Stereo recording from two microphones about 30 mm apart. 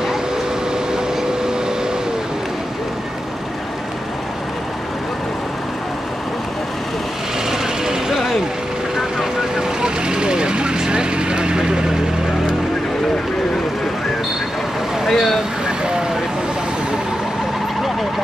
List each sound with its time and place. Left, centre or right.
7.8 s vehicle: centre
9.6 s vehicle: right
15.0 s vehicle: centre
15.6 s vehicle: right